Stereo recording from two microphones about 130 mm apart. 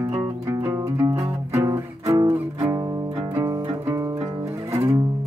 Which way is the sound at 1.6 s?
30° right (ahead or behind).